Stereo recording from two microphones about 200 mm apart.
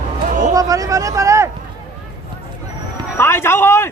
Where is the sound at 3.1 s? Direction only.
10° left (ahead or behind).